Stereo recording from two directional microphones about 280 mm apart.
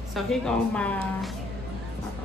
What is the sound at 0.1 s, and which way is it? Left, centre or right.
Speech, centre.